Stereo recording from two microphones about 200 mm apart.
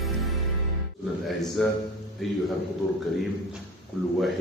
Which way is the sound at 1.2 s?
Centre (ahead or behind).